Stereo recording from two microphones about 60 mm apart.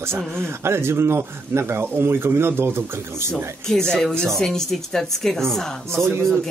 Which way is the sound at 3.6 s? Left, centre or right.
Centre.